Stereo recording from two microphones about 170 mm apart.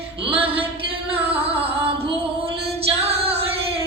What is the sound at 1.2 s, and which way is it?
Music, 35° right (ahead or behind).